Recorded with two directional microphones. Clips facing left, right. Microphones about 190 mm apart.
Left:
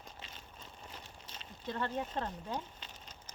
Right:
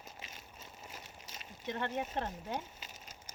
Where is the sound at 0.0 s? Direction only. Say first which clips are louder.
Even; 10° right (ahead or behind).